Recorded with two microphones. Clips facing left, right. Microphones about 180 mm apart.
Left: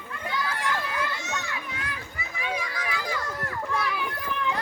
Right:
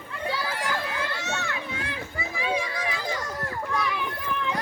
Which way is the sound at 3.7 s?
5° left (ahead or behind).